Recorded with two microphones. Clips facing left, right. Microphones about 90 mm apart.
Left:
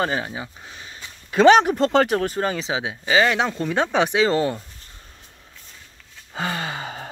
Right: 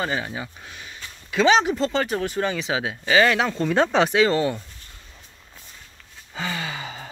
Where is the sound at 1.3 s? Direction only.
50° left (ahead or behind).